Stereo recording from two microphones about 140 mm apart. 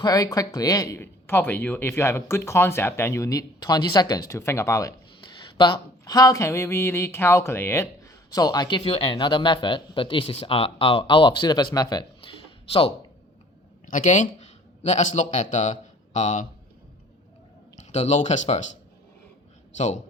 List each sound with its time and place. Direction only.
0.0 s speech: 25° left (ahead or behind)
5.2 s speech: 35° left (ahead or behind)
13.9 s speech: 65° left (ahead or behind)
17.7 s speech: 55° left (ahead or behind)
19.7 s a man's voice: 55° left (ahead or behind)